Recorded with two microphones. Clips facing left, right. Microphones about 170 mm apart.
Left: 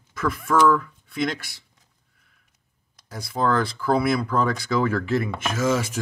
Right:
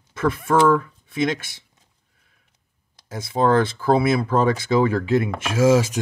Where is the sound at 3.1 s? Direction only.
20° right (ahead or behind).